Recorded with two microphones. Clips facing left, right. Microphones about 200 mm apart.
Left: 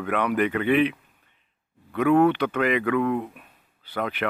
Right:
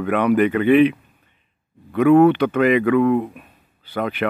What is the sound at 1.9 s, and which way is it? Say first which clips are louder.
Speech: right 6 dB; 25° right (ahead or behind).